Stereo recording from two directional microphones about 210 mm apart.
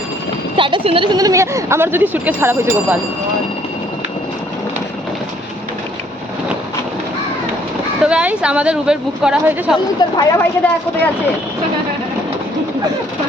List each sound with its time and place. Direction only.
0.5 s speech: 25° right (ahead or behind)
8.0 s a woman's voice: 5° right (ahead or behind)
10.0 s a woman's voice: 20° left (ahead or behind)